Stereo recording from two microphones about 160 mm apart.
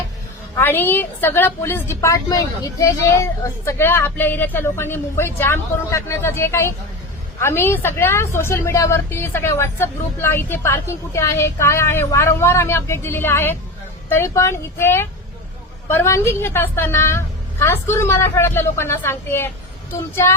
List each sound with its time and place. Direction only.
0.5 s a woman's voice: 10° left (ahead or behind)